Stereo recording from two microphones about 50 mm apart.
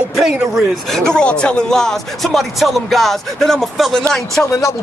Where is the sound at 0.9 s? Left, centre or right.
Centre.